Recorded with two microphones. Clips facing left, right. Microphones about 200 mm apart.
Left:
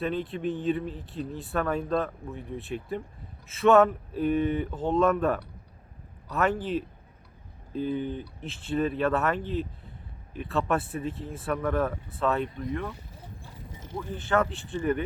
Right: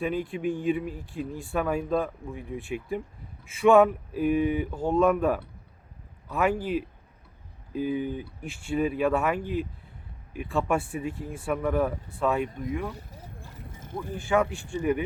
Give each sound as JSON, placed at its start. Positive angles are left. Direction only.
{"t": 0.0, "sound": "speech", "side_deg": -10}
{"t": 13.6, "sound": "mechanisms", "side_deg": -50}
{"t": 13.9, "sound": "speech", "side_deg": -10}